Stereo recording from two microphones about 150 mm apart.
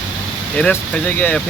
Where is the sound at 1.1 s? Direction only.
10° left (ahead or behind).